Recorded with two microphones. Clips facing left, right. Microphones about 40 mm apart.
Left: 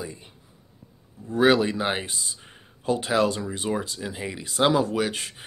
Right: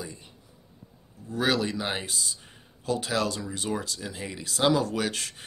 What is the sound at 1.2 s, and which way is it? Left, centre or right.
Speech, left.